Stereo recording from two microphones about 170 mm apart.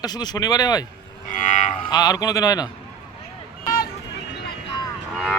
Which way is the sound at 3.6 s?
55° left (ahead or behind).